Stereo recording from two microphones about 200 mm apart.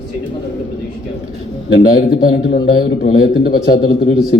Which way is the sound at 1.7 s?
50° left (ahead or behind).